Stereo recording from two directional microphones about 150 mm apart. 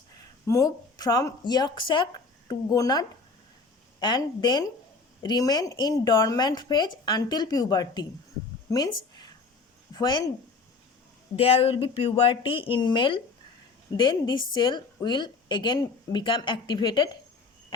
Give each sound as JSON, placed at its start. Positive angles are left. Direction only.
{"t": 0.4, "sound": "a woman's voice", "side_deg": 20}
{"t": 11.3, "sound": "a woman's voice", "side_deg": 40}